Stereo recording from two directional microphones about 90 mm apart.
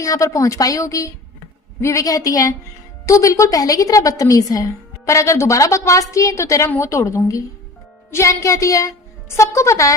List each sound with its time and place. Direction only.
0.0 s a woman's voice: 35° left (ahead or behind)